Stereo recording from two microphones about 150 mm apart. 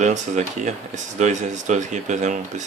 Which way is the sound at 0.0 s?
55° right (ahead or behind).